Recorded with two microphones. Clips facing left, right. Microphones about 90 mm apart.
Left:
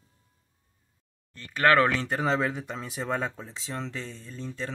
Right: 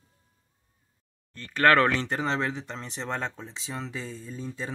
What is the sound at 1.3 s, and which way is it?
Speech, 15° left (ahead or behind).